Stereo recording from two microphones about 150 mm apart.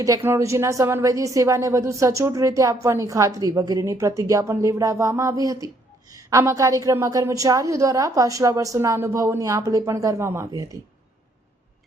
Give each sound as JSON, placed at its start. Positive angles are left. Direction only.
{"t": 0.0, "sound": "a woman's voice", "side_deg": -20}